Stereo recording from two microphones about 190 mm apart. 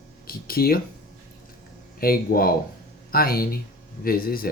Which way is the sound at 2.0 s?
50° left (ahead or behind).